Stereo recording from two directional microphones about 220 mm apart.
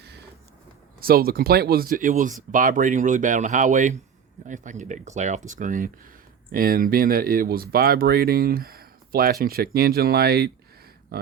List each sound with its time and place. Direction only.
0.0 s vehicle: 50° right (ahead or behind)
0.9 s speech: 45° right (ahead or behind)